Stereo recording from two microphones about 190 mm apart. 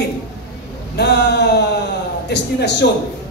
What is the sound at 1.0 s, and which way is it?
A man's voice, 60° left (ahead or behind).